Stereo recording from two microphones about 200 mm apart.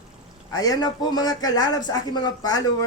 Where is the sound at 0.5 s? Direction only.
20° left (ahead or behind).